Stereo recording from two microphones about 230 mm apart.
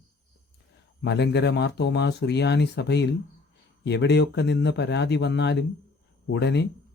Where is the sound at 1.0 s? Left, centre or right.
Left.